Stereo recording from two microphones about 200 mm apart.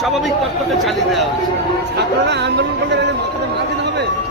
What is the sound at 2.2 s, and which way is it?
Speech, 60° right (ahead or behind).